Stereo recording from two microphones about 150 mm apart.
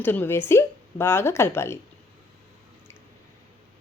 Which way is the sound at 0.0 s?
15° left (ahead or behind).